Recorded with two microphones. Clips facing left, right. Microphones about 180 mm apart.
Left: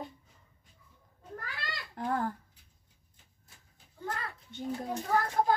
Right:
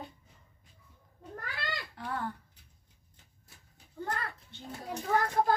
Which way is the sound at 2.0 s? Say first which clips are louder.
Left 7 dB; 40° left (ahead or behind).